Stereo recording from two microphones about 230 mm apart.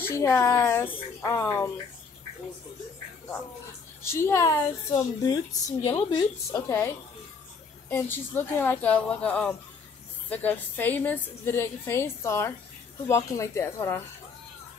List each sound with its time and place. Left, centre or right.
0.0 s a woman's voice: centre
4.0 s a woman's voice: centre
7.9 s a woman's voice: centre